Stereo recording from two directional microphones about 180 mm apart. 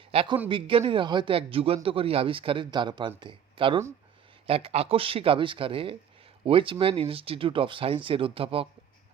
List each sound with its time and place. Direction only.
0.1 s a man's voice: 30° right (ahead or behind)